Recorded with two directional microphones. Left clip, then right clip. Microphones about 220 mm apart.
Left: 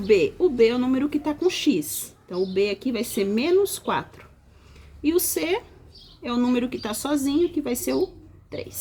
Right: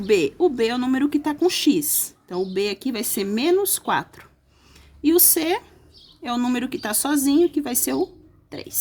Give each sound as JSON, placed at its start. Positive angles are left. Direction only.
{"t": 0.1, "sound": "speech", "side_deg": -45}